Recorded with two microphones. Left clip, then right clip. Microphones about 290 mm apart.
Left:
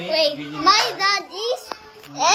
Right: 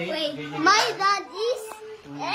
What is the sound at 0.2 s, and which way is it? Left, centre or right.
A child's voice, centre.